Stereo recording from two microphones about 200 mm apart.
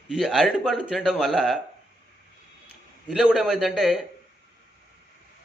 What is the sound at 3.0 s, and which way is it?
Speech, 5° right (ahead or behind).